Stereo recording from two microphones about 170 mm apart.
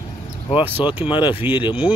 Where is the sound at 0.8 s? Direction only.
30° left (ahead or behind).